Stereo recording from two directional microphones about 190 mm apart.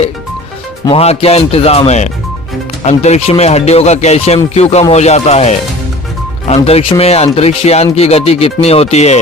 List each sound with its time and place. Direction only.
0.9 s speech: 30° left (ahead or behind)